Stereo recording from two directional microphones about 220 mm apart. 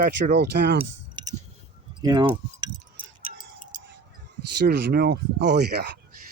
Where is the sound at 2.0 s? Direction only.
20° right (ahead or behind).